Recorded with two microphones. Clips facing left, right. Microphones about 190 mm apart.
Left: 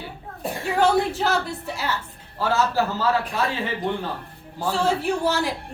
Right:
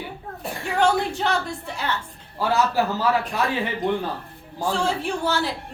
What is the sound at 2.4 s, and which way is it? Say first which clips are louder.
Speech: right 1 dB; 15° right (ahead or behind).